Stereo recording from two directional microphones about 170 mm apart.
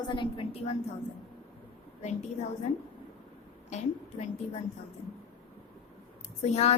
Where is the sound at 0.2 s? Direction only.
35° left (ahead or behind).